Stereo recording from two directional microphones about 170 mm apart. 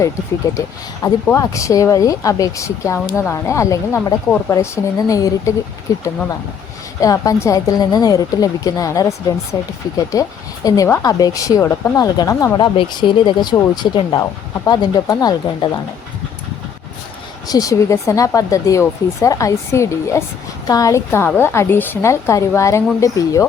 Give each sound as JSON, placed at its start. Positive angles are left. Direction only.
{"t": 0.5, "sound": "a woman's voice", "side_deg": 20}
{"t": 17.5, "sound": "a woman's voice", "side_deg": 20}